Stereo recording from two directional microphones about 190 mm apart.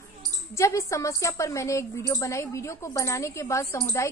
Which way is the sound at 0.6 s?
15° left (ahead or behind).